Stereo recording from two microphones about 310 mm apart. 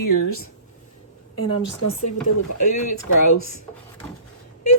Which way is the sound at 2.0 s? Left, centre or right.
Left.